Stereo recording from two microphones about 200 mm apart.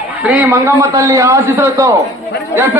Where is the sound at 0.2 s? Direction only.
5° right (ahead or behind).